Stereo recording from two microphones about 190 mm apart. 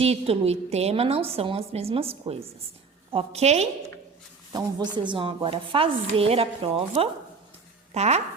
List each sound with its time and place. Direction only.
0.0 s a woman's voice: 35° right (ahead or behind)
4.9 s a woman's voice: 25° right (ahead or behind)